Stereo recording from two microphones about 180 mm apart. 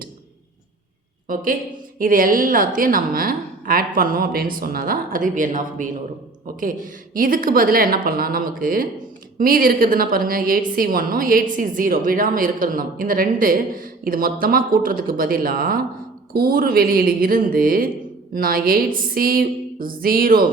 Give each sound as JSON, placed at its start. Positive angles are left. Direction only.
{"t": 1.3, "sound": "a woman's voice", "side_deg": -50}